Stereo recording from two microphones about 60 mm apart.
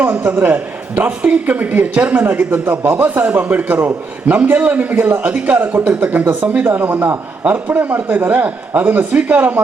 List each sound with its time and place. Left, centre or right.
0.3 s a man's voice: right